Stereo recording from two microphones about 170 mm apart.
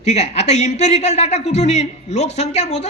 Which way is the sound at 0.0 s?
40° left (ahead or behind).